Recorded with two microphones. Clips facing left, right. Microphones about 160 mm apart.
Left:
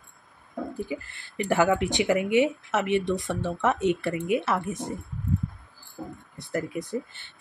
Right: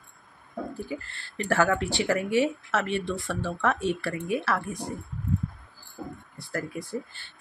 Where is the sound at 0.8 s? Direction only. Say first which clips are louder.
Left 1 dB; 15° left (ahead or behind).